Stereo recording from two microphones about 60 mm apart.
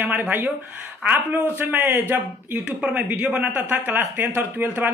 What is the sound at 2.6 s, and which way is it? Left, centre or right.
A man's voice, centre.